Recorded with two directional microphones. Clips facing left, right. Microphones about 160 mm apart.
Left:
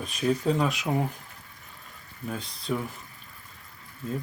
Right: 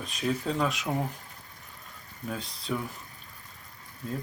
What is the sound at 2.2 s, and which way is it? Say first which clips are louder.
Speech: left 2 dB; centre (ahead or behind).